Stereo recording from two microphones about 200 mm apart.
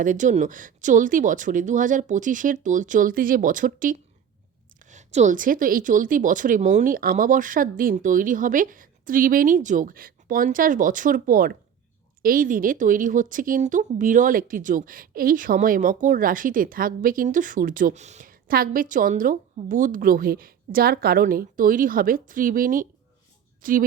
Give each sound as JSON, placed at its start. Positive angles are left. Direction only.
{"t": 0.0, "sound": "a woman's voice", "side_deg": -40}